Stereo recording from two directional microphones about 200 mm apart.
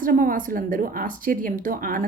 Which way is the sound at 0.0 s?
40° right (ahead or behind).